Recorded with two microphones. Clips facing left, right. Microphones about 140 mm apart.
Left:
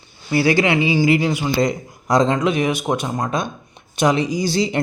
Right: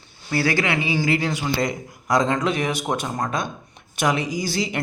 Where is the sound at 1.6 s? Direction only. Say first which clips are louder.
Left 5 dB; 25° left (ahead or behind).